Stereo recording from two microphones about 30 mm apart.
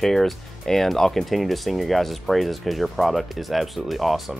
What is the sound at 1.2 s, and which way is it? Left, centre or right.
Speech, centre.